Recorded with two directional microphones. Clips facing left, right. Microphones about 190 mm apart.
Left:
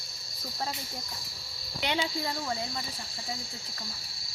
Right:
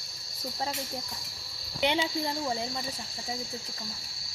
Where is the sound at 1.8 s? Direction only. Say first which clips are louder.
Right 3 dB; 20° right (ahead or behind).